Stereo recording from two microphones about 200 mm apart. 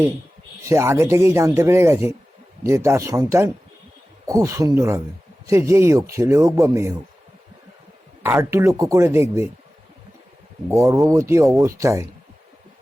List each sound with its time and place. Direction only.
0.6 s speech: 15° right (ahead or behind)
8.2 s speech: 10° right (ahead or behind)
10.7 s speech: 15° right (ahead or behind)